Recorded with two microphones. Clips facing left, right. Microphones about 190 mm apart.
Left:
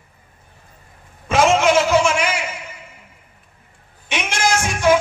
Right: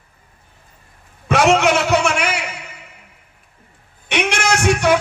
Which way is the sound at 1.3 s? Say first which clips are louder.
Even; 65° right (ahead or behind).